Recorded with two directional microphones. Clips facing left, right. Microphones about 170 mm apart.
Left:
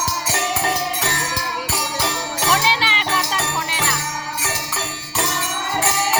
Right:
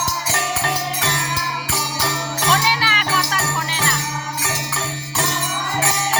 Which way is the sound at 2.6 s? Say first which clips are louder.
Even; 25° left (ahead or behind).